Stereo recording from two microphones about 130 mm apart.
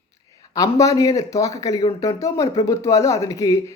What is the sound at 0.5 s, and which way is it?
Speech, 25° left (ahead or behind).